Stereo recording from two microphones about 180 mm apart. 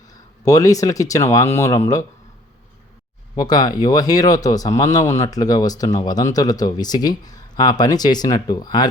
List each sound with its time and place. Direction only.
0.4 s speech: 20° left (ahead or behind)
3.3 s speech: 20° left (ahead or behind)